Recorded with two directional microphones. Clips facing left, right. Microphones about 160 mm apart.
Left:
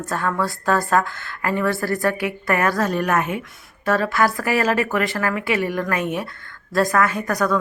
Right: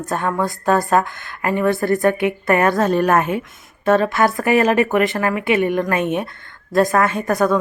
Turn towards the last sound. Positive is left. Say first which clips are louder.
# right 4 dB
turn(degrees=-25)  # may be behind; listen again after turning